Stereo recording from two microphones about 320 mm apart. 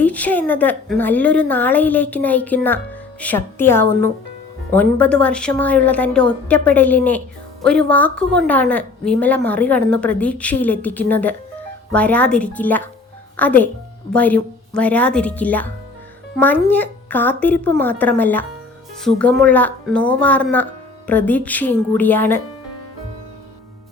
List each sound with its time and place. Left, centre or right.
0.0 s a woman's voice: centre